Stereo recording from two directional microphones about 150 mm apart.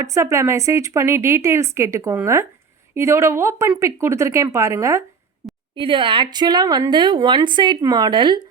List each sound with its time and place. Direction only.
0.0 s a woman's voice: 20° right (ahead or behind)
5.7 s a woman's voice: 35° right (ahead or behind)